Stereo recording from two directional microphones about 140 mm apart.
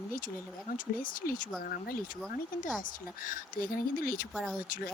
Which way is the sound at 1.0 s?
80° left.